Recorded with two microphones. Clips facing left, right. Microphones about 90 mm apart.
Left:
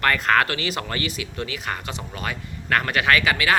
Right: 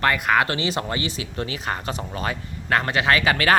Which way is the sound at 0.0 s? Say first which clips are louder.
Even; 15° right (ahead or behind).